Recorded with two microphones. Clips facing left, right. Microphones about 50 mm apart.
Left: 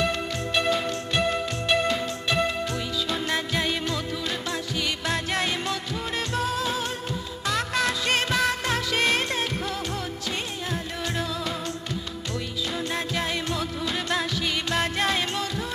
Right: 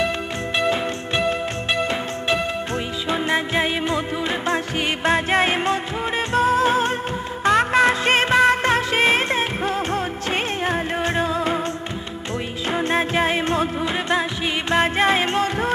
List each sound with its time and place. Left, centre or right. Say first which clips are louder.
2.2 s music: right 2 dB; right